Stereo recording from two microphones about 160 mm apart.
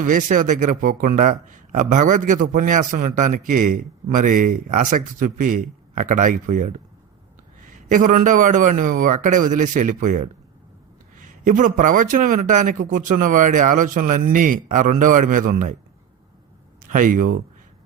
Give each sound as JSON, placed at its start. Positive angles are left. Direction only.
{"t": 0.0, "sound": "speech", "side_deg": -55}
{"t": 16.8, "sound": "speech", "side_deg": -55}